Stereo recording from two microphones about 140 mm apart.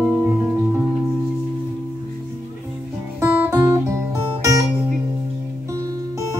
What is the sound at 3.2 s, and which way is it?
Music, 20° right (ahead or behind).